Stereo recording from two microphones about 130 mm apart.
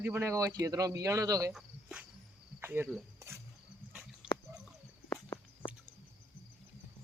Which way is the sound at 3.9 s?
5° right (ahead or behind).